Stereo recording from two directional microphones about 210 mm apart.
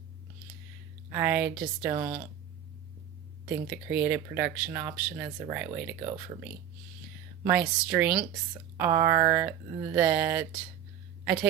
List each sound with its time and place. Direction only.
1.1 s speech: 10° right (ahead or behind)
3.5 s speech: 5° right (ahead or behind)
7.4 s speech: 5° right (ahead or behind)